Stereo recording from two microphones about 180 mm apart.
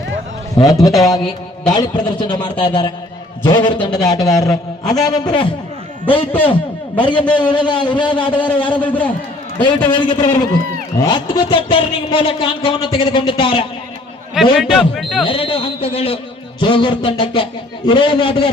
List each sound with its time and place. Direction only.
0.5 s speech: 20° left (ahead or behind)
7.0 s speech: 30° left (ahead or behind)
8.8 s a man's voice: 10° left (ahead or behind)
9.6 s speech: 25° left (ahead or behind)
14.5 s speech: centre (ahead or behind)
15.2 s speech: 30° left (ahead or behind)